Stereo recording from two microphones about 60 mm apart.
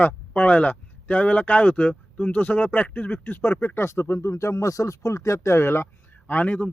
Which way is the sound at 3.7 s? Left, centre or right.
Left.